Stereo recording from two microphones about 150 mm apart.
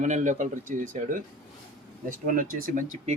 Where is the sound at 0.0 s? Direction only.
55° right (ahead or behind).